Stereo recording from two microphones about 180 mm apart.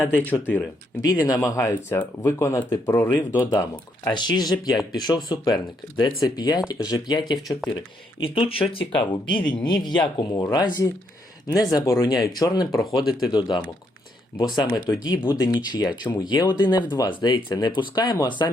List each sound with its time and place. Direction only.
0.0 s speech: 10° left (ahead or behind)